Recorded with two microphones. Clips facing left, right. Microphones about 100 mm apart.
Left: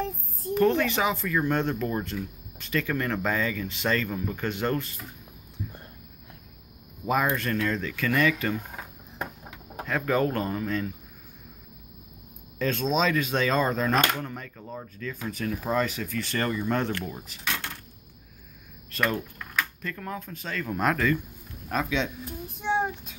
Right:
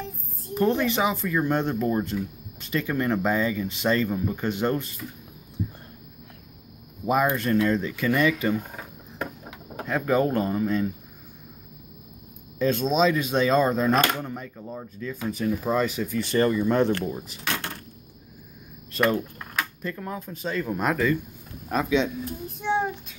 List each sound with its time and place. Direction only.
0.6 s speech: 15° right (ahead or behind)
7.1 s speech: 15° right (ahead or behind)
12.5 s speech: 10° right (ahead or behind)
18.9 s speech: 25° right (ahead or behind)
22.2 s child singing: 5° left (ahead or behind)